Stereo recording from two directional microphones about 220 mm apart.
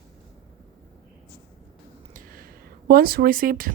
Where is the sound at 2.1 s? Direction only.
40° right (ahead or behind).